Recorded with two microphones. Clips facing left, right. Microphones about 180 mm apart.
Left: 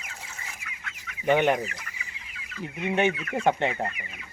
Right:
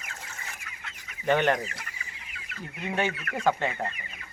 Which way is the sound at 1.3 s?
15° left (ahead or behind).